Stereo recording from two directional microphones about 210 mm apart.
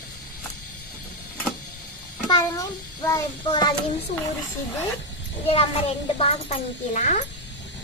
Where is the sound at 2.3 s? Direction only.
15° left (ahead or behind).